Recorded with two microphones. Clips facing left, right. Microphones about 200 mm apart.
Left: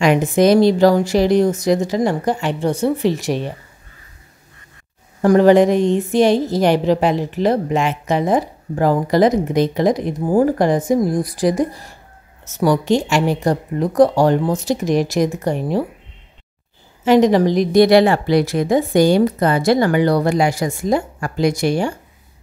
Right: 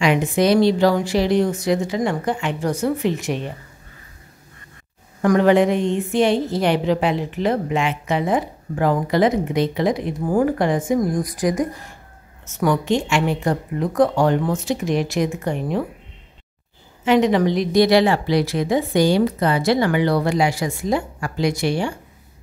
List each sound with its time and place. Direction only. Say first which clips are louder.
0.0 s a woman's voice: left 4 dB; 45° left (ahead or behind)
5.2 s a woman's voice: left 4 dB; 35° left (ahead or behind)
17.0 s a woman's voice: left 4 dB; 40° left (ahead or behind)